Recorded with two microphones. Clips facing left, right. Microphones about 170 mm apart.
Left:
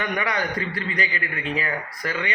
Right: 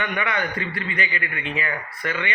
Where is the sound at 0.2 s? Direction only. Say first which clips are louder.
Even; 35° left (ahead or behind).